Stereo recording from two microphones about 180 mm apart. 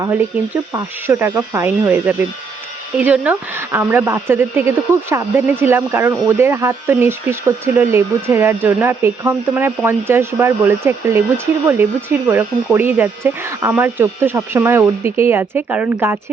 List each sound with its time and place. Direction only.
0.0 s speech: 15° right (ahead or behind)